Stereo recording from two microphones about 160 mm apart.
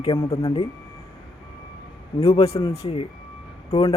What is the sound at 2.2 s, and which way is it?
Speech, 40° left (ahead or behind).